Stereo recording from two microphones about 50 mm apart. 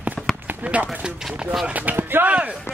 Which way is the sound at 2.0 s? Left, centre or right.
Right.